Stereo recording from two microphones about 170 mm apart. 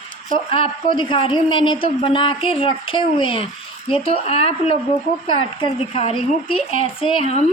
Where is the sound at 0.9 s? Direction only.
30° left (ahead or behind).